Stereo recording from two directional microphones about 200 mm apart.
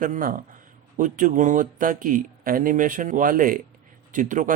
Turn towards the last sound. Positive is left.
turn(degrees=-40)  # may be behind; listen again after turning